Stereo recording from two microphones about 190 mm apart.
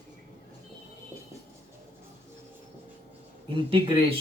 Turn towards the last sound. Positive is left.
turn(degrees=-30)  # may be behind; listen again after turning